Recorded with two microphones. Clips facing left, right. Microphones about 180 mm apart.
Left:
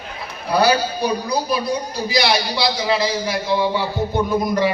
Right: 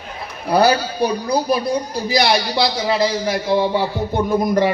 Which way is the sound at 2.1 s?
50° right (ahead or behind).